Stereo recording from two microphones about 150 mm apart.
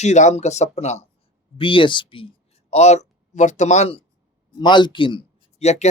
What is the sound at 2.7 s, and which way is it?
Speech, 50° left (ahead or behind).